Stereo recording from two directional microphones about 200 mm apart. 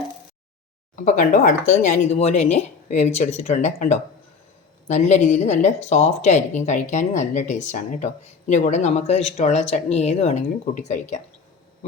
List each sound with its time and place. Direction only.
1.0 s speech: 40° left (ahead or behind)